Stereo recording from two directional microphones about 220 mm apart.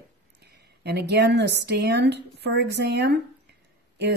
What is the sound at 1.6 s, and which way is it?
Speech, 50° right (ahead or behind).